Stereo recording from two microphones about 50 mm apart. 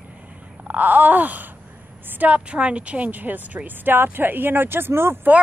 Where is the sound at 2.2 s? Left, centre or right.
Right.